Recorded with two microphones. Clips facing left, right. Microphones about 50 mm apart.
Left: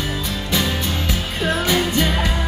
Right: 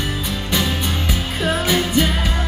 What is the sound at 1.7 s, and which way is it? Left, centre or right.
Music, centre.